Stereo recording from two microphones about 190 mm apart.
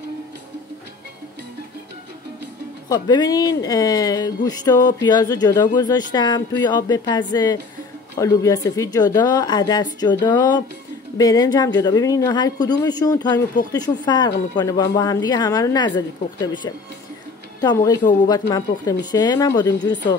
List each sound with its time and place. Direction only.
2.9 s speech: 20° left (ahead or behind)